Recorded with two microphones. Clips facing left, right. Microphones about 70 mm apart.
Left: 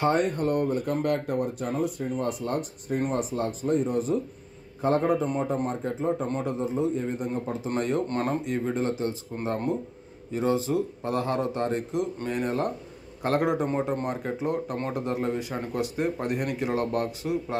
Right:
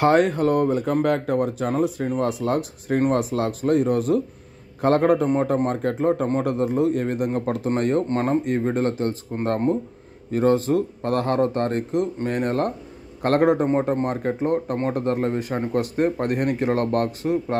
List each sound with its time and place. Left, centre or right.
0.0 s a man's voice: right
7.7 s a man's voice: right
8.1 s speech: right
8.5 s a man's voice: right
10.3 s a man's voice: right